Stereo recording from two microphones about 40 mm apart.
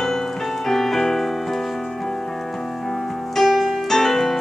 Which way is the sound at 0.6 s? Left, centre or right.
Centre.